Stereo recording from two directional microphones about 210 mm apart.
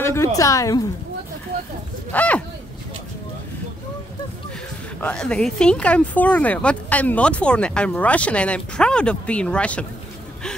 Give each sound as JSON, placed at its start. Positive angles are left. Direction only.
{"t": 0.0, "sound": "a woman's voice", "side_deg": 10}
{"t": 2.1, "sound": "speech", "side_deg": 5}
{"t": 5.0, "sound": "speech", "side_deg": 5}